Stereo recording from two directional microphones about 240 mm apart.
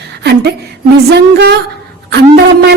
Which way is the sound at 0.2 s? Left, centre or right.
Right.